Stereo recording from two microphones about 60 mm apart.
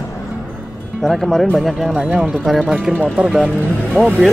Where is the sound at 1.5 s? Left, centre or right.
Centre.